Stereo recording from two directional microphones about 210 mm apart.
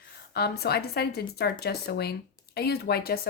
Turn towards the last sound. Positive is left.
turn(degrees=45)  # may be behind; listen again after turning